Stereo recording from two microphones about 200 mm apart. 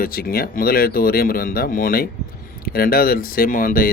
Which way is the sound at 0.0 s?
50° left (ahead or behind).